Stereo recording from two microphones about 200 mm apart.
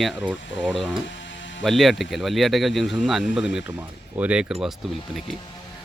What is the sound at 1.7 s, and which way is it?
Speech, centre (ahead or behind).